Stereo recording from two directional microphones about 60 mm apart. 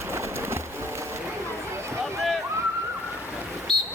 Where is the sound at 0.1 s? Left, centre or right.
Right.